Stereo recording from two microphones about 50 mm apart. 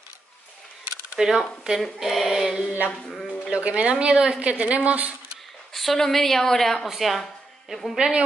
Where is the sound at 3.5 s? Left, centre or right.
Right.